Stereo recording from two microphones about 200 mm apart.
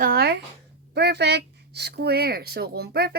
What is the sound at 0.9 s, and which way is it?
Speech, 55° right (ahead or behind).